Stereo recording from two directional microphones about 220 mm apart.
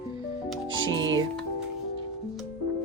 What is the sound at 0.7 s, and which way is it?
Music, 60° right (ahead or behind).